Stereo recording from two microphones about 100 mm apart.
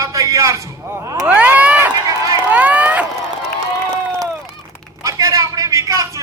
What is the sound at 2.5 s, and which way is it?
Run, 15° right (ahead or behind).